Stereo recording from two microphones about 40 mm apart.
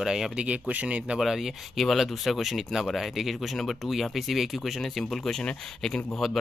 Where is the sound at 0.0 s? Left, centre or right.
Centre.